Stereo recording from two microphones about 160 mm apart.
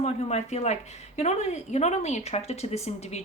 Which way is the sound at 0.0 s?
45° left (ahead or behind).